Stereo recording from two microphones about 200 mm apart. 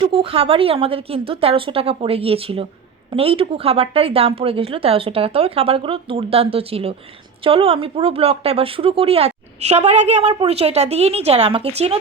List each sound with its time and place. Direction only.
0.0 s a woman's voice: 25° right (ahead or behind)